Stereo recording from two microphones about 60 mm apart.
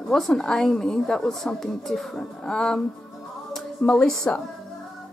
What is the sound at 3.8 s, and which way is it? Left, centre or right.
Speech, centre.